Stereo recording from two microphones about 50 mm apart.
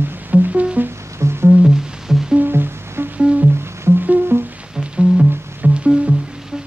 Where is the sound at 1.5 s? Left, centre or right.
Centre.